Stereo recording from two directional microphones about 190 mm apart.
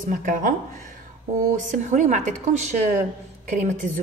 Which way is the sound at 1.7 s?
40° right (ahead or behind).